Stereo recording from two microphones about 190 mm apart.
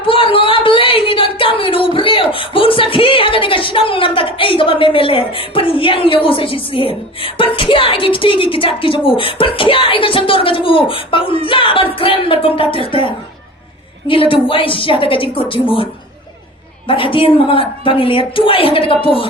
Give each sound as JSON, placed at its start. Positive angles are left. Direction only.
{"t": 0.1, "sound": "a woman's voice", "side_deg": 30}
{"t": 16.8, "sound": "a woman's voice", "side_deg": 25}